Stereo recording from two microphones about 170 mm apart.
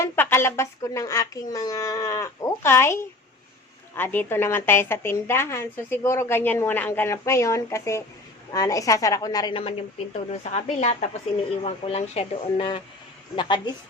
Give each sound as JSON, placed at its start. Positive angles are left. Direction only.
{"t": 0.0, "sound": "a woman's voice", "side_deg": 15}
{"t": 9.6, "sound": "a woman's voice", "side_deg": 35}